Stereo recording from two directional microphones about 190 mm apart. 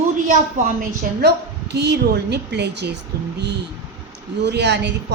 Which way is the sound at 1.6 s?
65° right (ahead or behind).